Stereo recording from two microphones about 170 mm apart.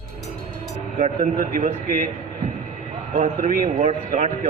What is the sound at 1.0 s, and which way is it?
A man's voice, 55° right (ahead or behind).